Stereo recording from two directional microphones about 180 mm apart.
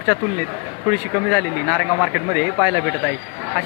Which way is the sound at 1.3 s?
Centre (ahead or behind).